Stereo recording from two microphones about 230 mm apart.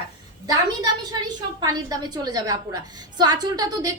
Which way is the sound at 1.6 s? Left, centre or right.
Centre.